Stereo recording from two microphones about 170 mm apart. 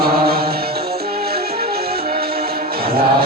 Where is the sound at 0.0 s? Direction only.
65° right (ahead or behind).